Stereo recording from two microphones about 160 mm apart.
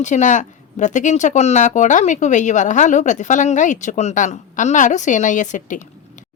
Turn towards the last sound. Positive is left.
turn(degrees=55)  # may be behind; listen again after turning